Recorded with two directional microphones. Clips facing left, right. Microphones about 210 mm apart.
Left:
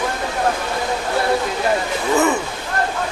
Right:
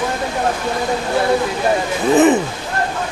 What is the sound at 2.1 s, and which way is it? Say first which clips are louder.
Speech: right 6 dB; 20° right (ahead or behind).